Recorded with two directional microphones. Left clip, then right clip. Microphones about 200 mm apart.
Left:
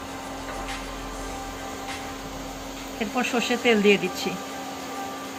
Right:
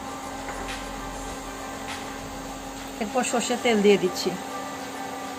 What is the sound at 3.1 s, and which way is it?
Speech, 25° right (ahead or behind).